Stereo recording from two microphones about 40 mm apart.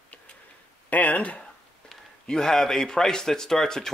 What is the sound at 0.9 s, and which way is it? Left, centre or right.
Speech, left.